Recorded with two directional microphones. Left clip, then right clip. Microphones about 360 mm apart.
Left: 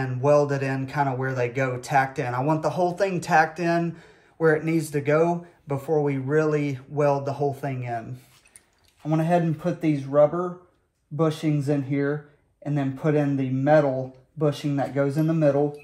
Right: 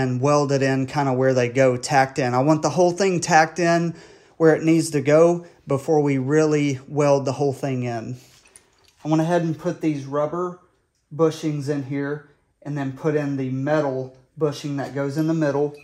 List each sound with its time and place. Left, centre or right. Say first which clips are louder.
0.0 s speech: even; right
9.3 s a man's voice: right 1 dB; centre